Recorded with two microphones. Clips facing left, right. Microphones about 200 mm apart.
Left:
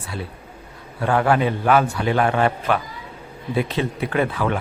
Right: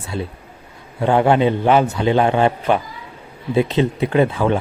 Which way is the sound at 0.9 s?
25° right (ahead or behind).